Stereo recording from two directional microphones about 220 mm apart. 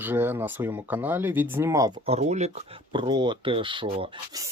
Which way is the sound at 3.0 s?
20° right (ahead or behind).